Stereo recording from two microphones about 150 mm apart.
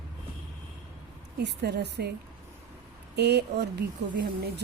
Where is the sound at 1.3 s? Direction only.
90° right.